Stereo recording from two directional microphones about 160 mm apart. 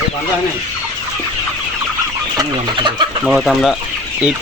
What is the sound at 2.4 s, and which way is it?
Speech, 30° right (ahead or behind).